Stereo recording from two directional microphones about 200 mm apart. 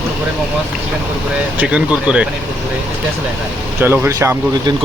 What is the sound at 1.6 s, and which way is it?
Speech, 5° right (ahead or behind).